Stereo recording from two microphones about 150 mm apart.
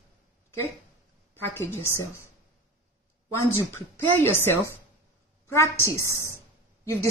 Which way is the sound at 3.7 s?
15° left (ahead or behind).